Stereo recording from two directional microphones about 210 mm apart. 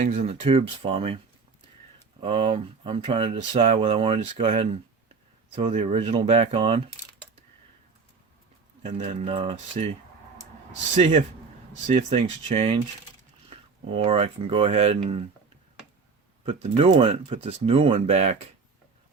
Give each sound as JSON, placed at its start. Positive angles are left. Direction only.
{"t": 0.0, "sound": "speech", "side_deg": -30}
{"t": 2.2, "sound": "speech", "side_deg": -25}
{"t": 8.8, "sound": "speech", "side_deg": -30}
{"t": 11.9, "sound": "speech", "side_deg": -30}
{"t": 16.5, "sound": "speech", "side_deg": -30}